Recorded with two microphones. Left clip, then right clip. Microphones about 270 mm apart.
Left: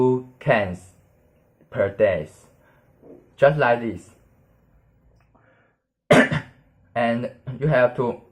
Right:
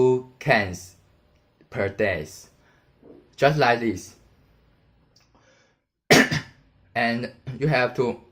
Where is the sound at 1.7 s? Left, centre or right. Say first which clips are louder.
Left 5 dB; right.